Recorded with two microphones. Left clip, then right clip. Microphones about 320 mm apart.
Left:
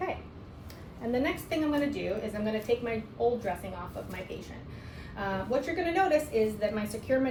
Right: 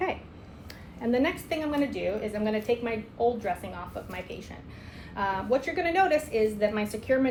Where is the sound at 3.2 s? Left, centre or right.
Right.